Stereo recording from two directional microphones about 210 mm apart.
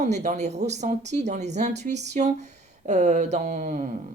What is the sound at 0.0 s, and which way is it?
Speech, 35° right (ahead or behind).